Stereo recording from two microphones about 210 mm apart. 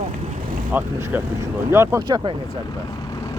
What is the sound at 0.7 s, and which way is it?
Speech, 10° right (ahead or behind).